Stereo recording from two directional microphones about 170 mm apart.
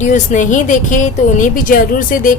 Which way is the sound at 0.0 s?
45° left (ahead or behind).